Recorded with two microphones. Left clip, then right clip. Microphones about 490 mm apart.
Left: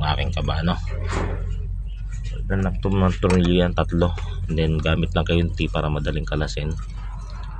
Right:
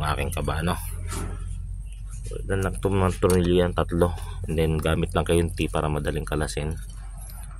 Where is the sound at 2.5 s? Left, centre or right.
Right.